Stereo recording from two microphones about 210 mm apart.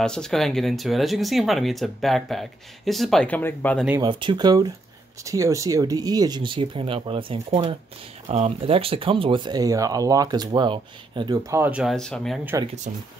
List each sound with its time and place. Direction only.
0.0 s speech: 5° left (ahead or behind)
4.0 s speech: 25° right (ahead or behind); by 12.4 s 5° left (ahead or behind)